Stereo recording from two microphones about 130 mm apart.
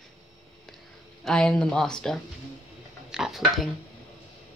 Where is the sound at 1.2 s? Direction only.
5° left (ahead or behind).